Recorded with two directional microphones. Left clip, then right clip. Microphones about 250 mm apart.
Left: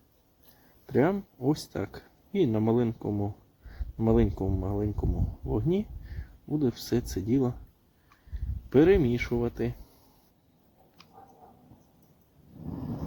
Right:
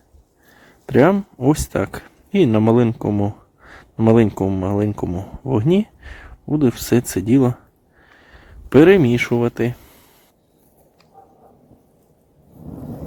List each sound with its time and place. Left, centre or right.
0.9 s speech: right
8.7 s speech: right